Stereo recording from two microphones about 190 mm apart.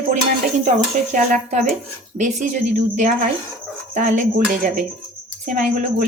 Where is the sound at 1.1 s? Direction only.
40° right (ahead or behind).